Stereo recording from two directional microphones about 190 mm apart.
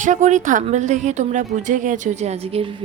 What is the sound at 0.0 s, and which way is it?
A woman's voice, 40° right (ahead or behind).